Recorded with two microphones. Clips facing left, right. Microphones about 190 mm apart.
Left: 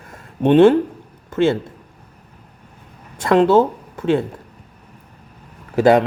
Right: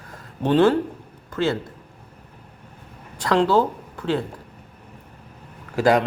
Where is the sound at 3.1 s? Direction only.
20° left (ahead or behind).